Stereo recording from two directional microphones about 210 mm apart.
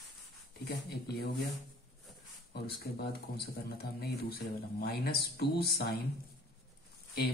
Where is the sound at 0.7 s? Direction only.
50° left (ahead or behind).